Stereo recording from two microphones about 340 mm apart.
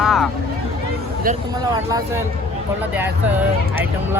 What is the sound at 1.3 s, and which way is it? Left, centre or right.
Speech, right.